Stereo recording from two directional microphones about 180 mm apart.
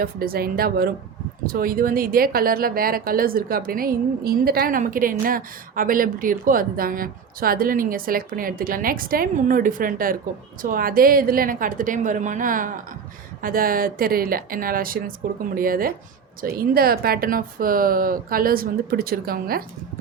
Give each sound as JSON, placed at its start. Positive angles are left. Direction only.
{"t": 0.0, "sound": "a woman's voice", "side_deg": -55}